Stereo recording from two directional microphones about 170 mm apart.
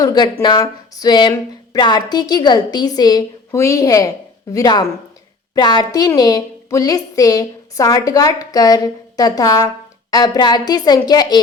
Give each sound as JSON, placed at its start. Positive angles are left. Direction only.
{"t": 0.0, "sound": "speech", "side_deg": 20}